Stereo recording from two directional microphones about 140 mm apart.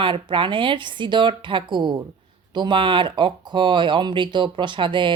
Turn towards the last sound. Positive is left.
turn(degrees=-35)  # may be behind; listen again after turning